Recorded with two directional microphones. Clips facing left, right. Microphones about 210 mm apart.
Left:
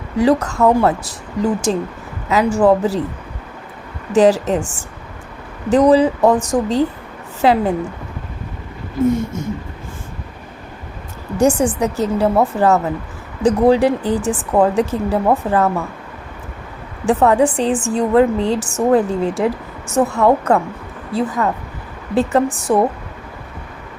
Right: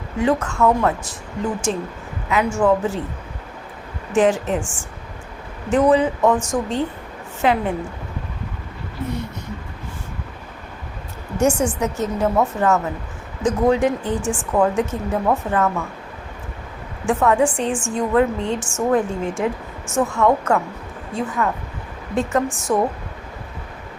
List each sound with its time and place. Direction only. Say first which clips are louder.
0.2 s a woman's voice: left 4 dB; 35° left (ahead or behind)
4.1 s a woman's voice: left 5 dB; 35° left (ahead or behind)
11.3 s a woman's voice: left 4 dB; 35° left (ahead or behind)
17.1 s a woman's voice: left 4 dB; 35° left (ahead or behind)